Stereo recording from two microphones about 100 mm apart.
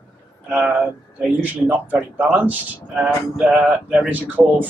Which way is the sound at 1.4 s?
15° right (ahead or behind).